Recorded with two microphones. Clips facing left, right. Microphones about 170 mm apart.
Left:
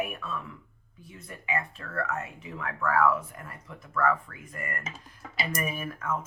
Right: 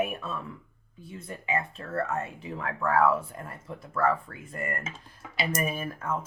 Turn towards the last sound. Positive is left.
turn(degrees=-30)  # may be behind; listen again after turning